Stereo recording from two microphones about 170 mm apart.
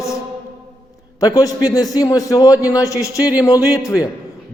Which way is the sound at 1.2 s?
20° left (ahead or behind).